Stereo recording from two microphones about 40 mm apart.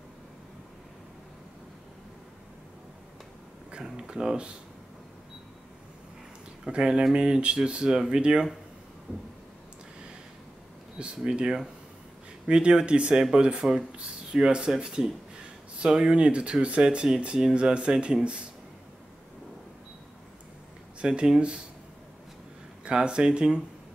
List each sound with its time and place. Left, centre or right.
3.7 s speech: centre
6.8 s speech: centre
11.0 s speech: right
13.1 s speech: centre
21.0 s speech: right
22.8 s speech: right